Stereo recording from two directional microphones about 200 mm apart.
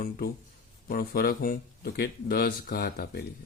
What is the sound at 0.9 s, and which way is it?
Speech, 50° left (ahead or behind).